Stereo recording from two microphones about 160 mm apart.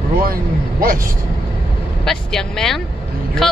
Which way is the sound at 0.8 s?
65° right (ahead or behind).